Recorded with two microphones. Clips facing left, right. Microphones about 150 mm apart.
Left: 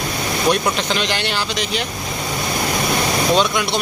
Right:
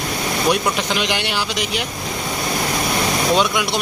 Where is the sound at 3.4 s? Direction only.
10° right (ahead or behind).